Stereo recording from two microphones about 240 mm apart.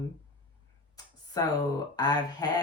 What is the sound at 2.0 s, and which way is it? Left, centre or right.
Speech, centre.